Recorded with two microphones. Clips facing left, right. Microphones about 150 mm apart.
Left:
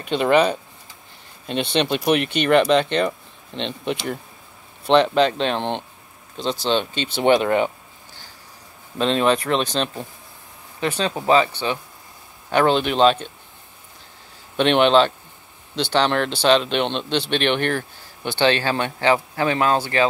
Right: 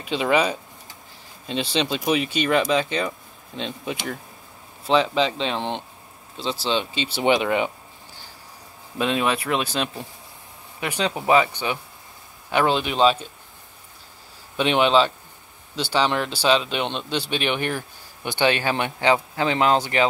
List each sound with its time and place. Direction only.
0.2 s speech: 5° right (ahead or behind)
1.5 s speech: 60° left (ahead or behind)
3.0 s a sound: 5° right (ahead or behind)
5.1 s speech: centre (ahead or behind)
7.3 s speech: 45° left (ahead or behind)
8.9 s speech: 10° right (ahead or behind)
14.6 s speech: 5° right (ahead or behind)